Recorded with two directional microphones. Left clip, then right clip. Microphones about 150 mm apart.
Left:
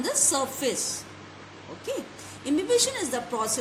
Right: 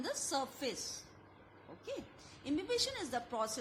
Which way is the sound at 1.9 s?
45° right (ahead or behind).